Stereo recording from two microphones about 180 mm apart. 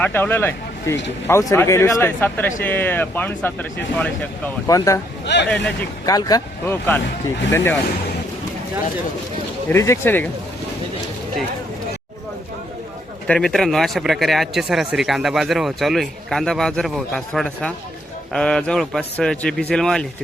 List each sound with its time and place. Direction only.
0.0 s speech: 10° left (ahead or behind)
5.2 s speech: 75° left (ahead or behind)
5.5 s speech: 5° left (ahead or behind)
6.1 s speech: 20° left (ahead or behind)
9.6 s speech: 15° left (ahead or behind)
13.2 s speech: 5° left (ahead or behind)